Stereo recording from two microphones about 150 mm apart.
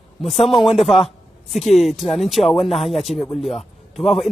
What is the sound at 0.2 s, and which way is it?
A man's voice, centre (ahead or behind).